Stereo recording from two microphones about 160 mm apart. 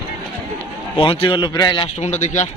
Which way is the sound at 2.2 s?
50° left (ahead or behind).